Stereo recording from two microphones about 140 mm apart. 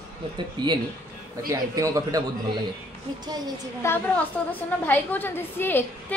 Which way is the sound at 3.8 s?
15° left (ahead or behind).